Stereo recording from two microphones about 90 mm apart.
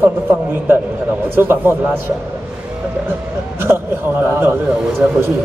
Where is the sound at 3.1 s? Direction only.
25° right (ahead or behind).